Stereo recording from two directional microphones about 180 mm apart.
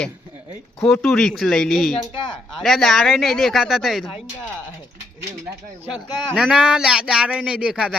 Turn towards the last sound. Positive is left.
turn(degrees=-5)  # may be behind; listen again after turning